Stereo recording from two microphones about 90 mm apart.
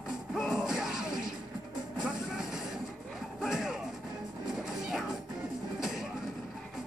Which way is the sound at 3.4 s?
5° right (ahead or behind).